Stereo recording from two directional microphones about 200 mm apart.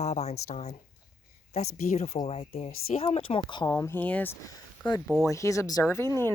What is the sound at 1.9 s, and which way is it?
Speech, 30° left (ahead or behind).